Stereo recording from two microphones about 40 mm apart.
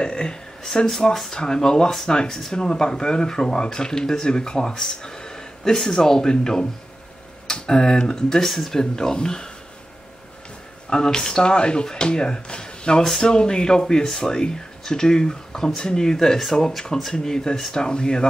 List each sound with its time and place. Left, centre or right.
0.0 s a sound: centre
0.7 s speech: centre
10.9 s speech: left